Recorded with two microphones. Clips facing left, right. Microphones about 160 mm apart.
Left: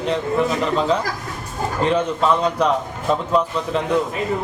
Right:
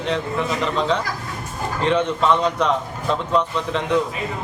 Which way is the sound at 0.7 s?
5° left (ahead or behind).